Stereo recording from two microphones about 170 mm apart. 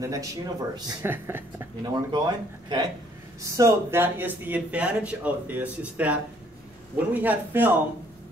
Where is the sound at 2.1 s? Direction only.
25° right (ahead or behind); by 7.7 s 10° right (ahead or behind).